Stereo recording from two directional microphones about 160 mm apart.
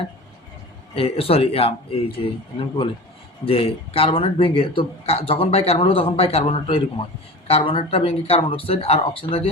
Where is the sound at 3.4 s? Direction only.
35° left (ahead or behind).